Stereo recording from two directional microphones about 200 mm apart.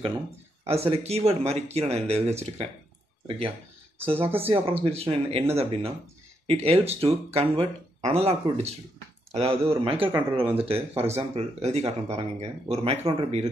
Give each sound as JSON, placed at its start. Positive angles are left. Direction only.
{"t": 0.7, "sound": "speech", "side_deg": -30}